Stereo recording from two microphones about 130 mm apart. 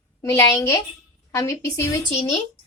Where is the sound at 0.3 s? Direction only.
20° left (ahead or behind).